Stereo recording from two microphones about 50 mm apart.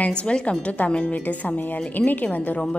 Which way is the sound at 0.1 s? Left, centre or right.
Left.